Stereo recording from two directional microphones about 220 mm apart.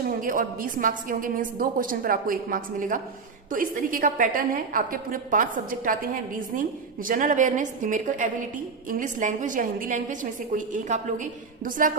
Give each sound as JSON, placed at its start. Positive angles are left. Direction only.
{"t": 0.2, "sound": "a woman's voice", "side_deg": -40}